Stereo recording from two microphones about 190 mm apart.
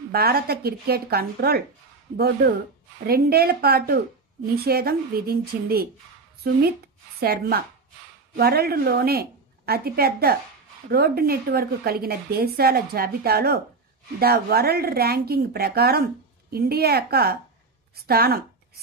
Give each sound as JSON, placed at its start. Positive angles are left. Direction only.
{"t": 0.1, "sound": "a woman's voice", "side_deg": -55}